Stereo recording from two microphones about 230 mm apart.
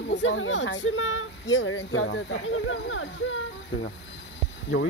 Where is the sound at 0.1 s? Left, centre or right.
Left.